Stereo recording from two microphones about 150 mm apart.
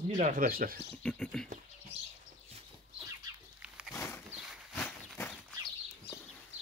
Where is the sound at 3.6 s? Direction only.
5° right (ahead or behind).